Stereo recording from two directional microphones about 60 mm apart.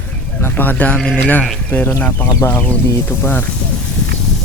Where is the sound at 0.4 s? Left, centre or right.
Left.